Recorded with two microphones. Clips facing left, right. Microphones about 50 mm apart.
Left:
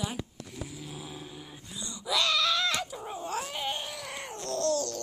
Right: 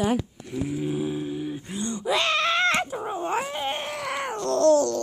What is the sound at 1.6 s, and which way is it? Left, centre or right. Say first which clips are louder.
Dog: right 6 dB; right.